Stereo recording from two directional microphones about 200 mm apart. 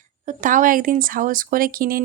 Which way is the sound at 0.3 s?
40° right (ahead or behind).